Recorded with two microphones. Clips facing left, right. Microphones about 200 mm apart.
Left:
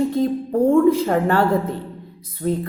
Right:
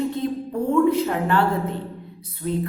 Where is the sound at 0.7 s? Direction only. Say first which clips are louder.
Left 2 dB; 45° left (ahead or behind).